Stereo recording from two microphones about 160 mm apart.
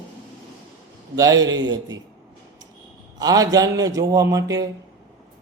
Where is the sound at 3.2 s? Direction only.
25° right (ahead or behind).